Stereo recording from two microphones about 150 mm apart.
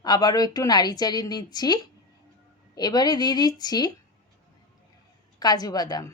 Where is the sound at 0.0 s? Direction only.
25° left (ahead or behind).